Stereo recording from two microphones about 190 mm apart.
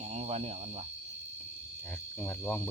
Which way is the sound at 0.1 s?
35° right (ahead or behind).